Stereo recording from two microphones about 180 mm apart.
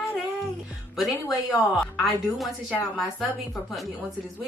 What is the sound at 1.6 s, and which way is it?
A woman's voice, 5° left (ahead or behind).